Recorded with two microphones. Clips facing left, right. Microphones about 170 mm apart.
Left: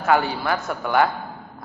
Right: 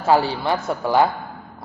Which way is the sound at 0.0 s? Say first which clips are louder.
Right 2 dB; 30° right (ahead or behind).